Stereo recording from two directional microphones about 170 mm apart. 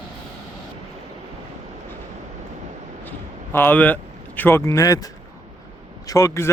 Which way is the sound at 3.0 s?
10° left (ahead or behind).